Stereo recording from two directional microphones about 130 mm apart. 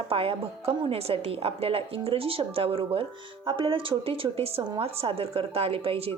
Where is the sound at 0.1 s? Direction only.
50° right (ahead or behind).